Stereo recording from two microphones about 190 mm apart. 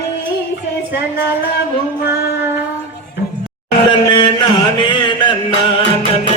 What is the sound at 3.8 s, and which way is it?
Chant, 25° left (ahead or behind).